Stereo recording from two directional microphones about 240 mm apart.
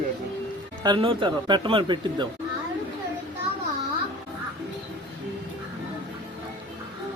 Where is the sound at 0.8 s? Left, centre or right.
Centre.